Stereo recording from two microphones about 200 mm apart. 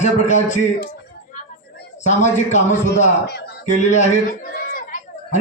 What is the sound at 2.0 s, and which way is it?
Speech, 35° left (ahead or behind).